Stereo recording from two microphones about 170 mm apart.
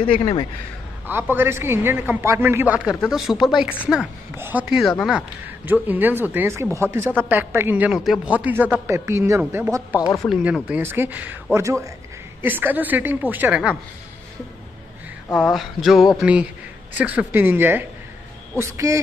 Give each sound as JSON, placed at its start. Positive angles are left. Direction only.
{"t": 0.0, "sound": "speech", "side_deg": 30}
{"t": 1.0, "sound": "a woman's voice", "side_deg": -10}
{"t": 10.1, "sound": "speech", "side_deg": 0}
{"t": 15.5, "sound": "a woman's voice", "side_deg": 0}